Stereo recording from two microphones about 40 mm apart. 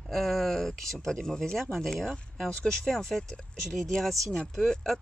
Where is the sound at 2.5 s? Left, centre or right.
Centre.